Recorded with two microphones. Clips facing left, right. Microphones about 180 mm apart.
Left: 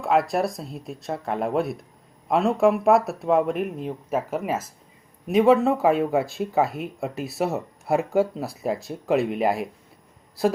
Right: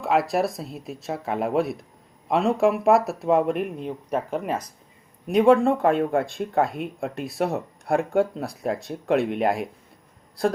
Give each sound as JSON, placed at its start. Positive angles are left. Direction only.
{"t": 0.0, "sound": "speech", "side_deg": 0}